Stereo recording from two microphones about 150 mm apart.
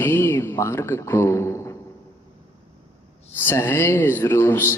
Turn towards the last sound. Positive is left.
turn(degrees=15)  # may be behind; listen again after turning